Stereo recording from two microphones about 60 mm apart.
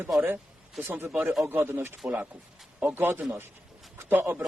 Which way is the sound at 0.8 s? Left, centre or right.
Right.